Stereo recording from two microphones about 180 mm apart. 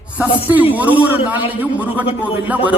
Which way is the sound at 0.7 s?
10° right (ahead or behind).